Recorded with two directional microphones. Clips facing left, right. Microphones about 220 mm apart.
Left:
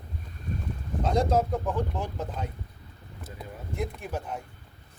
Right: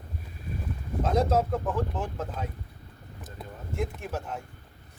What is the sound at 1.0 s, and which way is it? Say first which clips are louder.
Speech: even; 5° right (ahead or behind).